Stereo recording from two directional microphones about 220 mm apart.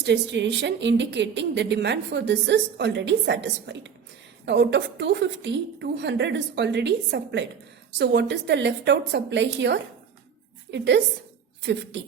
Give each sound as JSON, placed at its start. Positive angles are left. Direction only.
{"t": 0.0, "sound": "a woman's voice", "side_deg": -50}